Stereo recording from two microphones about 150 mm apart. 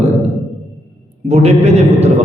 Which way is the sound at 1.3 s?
45° right (ahead or behind).